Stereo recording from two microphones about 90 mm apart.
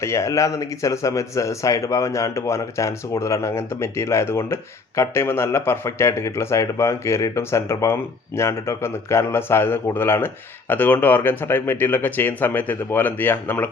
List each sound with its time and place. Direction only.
0.0 s speech: 35° left (ahead or behind)